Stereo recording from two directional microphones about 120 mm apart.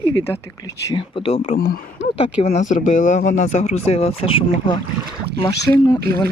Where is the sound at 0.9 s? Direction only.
50° left (ahead or behind).